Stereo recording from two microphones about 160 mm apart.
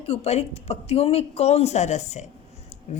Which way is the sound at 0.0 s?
40° left (ahead or behind).